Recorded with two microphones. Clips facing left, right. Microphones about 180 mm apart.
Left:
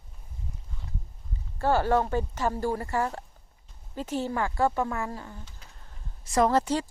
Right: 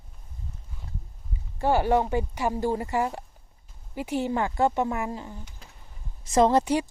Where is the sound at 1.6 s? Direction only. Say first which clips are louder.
Right 1 dB; 15° right (ahead or behind).